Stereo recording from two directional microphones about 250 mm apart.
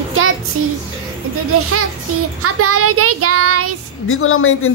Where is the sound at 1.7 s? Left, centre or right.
Right.